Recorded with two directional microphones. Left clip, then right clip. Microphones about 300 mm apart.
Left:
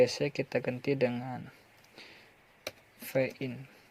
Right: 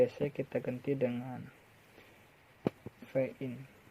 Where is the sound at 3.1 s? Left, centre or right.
Left.